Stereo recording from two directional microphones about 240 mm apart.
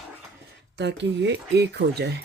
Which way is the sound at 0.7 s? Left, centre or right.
Right.